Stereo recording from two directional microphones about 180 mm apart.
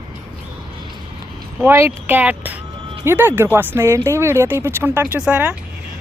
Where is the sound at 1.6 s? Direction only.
15° right (ahead or behind).